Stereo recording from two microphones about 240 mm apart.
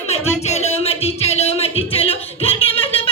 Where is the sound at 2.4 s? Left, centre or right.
Left.